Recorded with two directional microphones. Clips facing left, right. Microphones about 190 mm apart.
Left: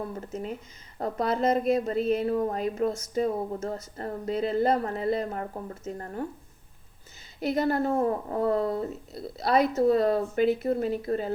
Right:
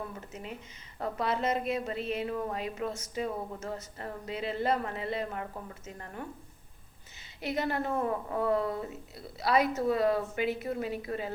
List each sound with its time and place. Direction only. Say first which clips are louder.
0.9 s a woman's voice: left 4 dB; 40° left (ahead or behind)
7.3 s a woman's voice: left 6 dB; 40° left (ahead or behind)